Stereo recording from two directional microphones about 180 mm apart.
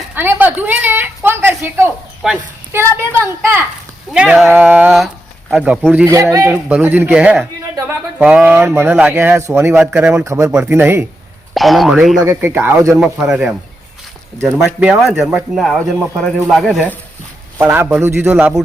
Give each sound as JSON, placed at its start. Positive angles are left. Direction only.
{"t": 0.1, "sound": "a woman's voice", "side_deg": -10}
{"t": 11.5, "sound": "speech", "side_deg": 0}
{"t": 12.2, "sound": "speech", "side_deg": -15}
{"t": 17.6, "sound": "speech", "side_deg": -10}